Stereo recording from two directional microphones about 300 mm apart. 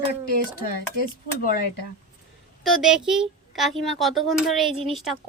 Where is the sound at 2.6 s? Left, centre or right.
Centre.